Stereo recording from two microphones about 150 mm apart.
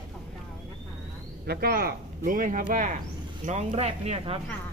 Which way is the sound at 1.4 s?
90° right.